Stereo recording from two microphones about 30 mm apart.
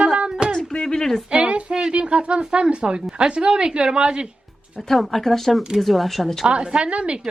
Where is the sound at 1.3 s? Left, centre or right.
Right.